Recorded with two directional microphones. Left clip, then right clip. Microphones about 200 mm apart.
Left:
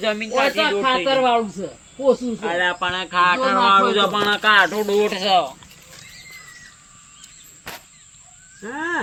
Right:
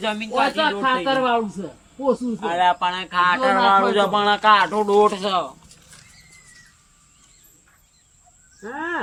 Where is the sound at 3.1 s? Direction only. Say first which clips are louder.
Left 2 dB; 25° right (ahead or behind).